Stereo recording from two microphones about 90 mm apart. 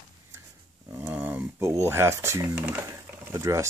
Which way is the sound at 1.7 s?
30° right (ahead or behind).